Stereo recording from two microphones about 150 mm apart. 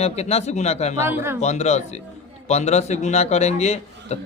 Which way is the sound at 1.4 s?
50° left (ahead or behind).